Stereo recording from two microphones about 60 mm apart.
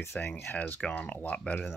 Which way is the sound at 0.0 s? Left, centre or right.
Left.